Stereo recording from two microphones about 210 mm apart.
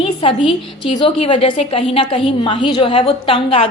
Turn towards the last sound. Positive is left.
turn(degrees=25)  # may be behind; listen again after turning